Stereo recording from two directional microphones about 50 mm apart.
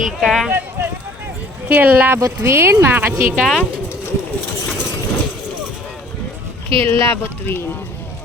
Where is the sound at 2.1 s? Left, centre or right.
Right.